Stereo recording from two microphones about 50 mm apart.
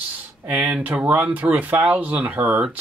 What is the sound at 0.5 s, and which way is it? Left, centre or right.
Speech, right.